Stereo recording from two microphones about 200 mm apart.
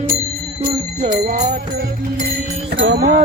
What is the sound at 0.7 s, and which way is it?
Bell, 35° right (ahead or behind).